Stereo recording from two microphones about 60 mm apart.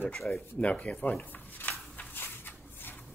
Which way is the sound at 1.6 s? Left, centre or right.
Left.